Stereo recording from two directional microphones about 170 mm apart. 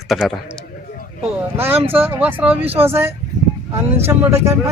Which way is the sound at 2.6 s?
35° right (ahead or behind).